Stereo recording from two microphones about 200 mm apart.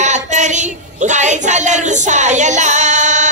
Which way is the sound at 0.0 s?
35° right (ahead or behind).